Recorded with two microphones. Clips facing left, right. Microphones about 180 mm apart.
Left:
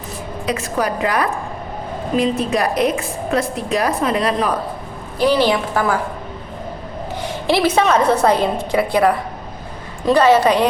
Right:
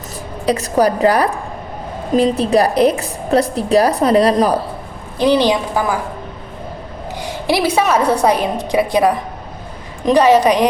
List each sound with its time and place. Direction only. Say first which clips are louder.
0.4 s a woman's voice: right 6 dB; 35° right (ahead or behind)
5.2 s a woman's voice: right 2 dB; 20° right (ahead or behind)
7.2 s a woman's voice: even; 15° right (ahead or behind)